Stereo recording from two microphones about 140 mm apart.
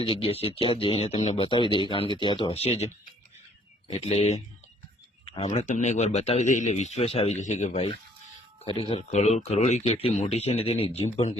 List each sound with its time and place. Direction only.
0.0 s speech: 40° left (ahead or behind)
7.3 s speech: 60° left (ahead or behind)
8.6 s speech: 40° left (ahead or behind)